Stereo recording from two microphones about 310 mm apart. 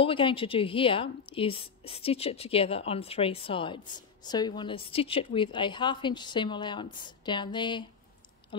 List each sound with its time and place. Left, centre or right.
0.0 s a woman's voice: centre